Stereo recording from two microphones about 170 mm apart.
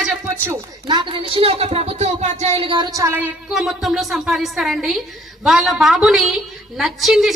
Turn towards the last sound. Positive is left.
turn(degrees=0)  # may be behind; listen again after turning